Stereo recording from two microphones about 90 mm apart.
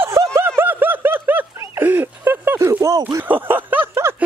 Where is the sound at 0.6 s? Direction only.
20° right (ahead or behind).